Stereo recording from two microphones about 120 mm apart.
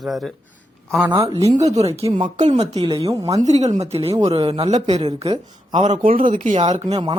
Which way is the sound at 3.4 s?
70° right (ahead or behind).